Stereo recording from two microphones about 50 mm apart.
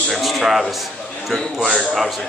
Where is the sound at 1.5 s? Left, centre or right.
Centre.